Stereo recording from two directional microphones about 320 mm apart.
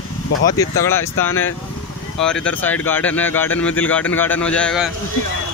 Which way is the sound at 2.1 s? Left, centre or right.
Centre.